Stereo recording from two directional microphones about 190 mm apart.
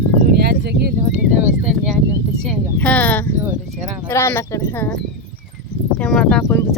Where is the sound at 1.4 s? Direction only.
5° right (ahead or behind).